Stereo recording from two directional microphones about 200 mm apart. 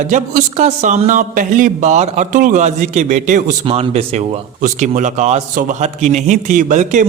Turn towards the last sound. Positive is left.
turn(degrees=-40)  # may be behind; listen again after turning